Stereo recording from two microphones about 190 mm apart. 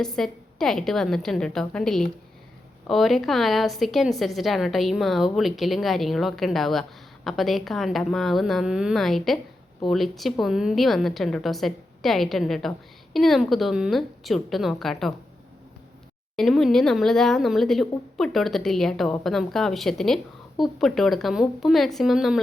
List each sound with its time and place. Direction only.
0.0 s a woman's voice: 5° left (ahead or behind)
16.3 s a woman's voice: centre (ahead or behind)